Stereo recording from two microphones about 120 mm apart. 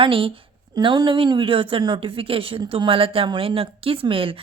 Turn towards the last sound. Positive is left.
turn(degrees=-50)  # may be behind; listen again after turning